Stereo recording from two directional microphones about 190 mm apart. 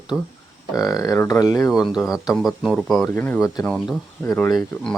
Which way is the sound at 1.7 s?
Centre (ahead or behind).